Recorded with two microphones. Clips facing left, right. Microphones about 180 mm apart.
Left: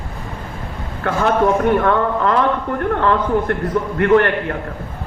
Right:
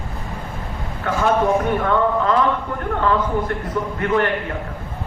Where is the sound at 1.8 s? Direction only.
60° left (ahead or behind).